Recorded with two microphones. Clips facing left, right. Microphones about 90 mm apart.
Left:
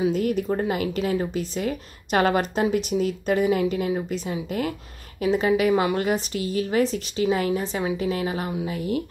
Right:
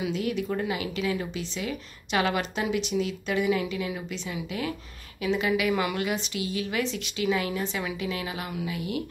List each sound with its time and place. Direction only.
0.0 s a woman's voice: 45° left (ahead or behind)